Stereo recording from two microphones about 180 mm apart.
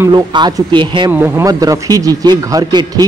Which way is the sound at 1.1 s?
15° right (ahead or behind).